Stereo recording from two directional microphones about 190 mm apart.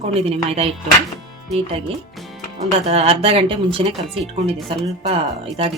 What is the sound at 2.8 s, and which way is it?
Speech, 30° right (ahead or behind).